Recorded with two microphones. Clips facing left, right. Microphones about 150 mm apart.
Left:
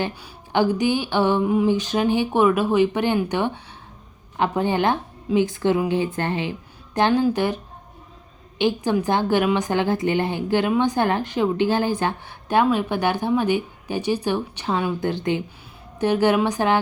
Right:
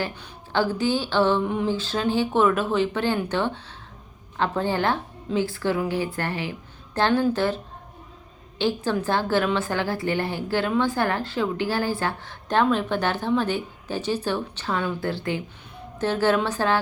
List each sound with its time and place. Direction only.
0.0 s speech: 15° left (ahead or behind)